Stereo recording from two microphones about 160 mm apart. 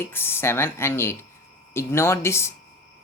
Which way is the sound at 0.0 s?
15° left (ahead or behind).